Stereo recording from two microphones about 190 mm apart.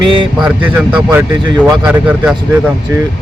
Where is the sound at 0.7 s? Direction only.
10° right (ahead or behind).